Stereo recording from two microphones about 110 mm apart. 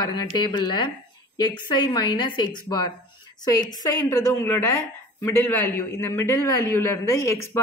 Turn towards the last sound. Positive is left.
turn(degrees=25)  # may be behind; listen again after turning